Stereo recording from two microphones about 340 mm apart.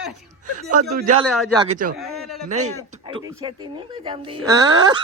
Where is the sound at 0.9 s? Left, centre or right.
Right.